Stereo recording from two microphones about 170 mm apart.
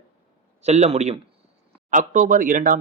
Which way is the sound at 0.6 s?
40° right (ahead or behind).